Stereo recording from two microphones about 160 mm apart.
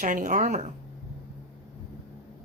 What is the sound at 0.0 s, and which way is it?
Speech, 55° right (ahead or behind).